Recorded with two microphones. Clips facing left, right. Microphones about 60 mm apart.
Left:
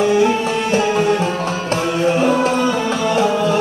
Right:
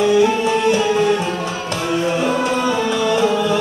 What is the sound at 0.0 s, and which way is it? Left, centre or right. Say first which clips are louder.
Music: even; left.